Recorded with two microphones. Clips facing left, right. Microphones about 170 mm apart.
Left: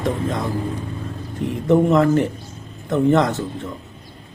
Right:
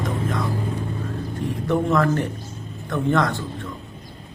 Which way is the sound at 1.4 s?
20° left (ahead or behind).